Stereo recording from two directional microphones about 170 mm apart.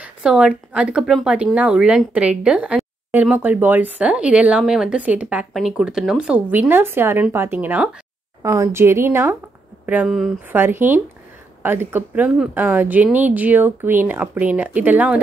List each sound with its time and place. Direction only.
0.0 s speech: 5° right (ahead or behind)
10.5 s speech: 10° right (ahead or behind)